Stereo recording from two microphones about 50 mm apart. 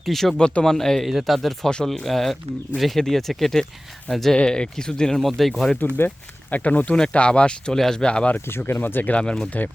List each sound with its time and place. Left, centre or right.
0.0 s speech: centre
0.3 s speech: centre
1.0 s speech: centre
4.4 s speech: centre
5.2 s speech: centre
6.5 s speech: left; by 8.0 s centre
8.0 s speech: centre
8.4 s speech: left
9.1 s speech: centre